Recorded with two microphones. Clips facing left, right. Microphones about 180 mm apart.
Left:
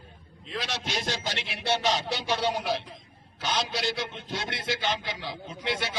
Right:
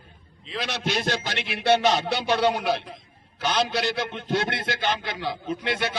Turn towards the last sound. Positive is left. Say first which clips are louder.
# right 5 dB
turn(degrees=-60)  # may be behind; listen again after turning